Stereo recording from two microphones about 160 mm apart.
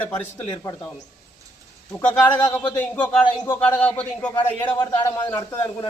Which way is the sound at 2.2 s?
15° left (ahead or behind).